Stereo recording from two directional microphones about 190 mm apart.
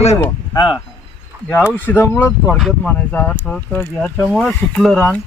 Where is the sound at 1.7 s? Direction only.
10° left (ahead or behind).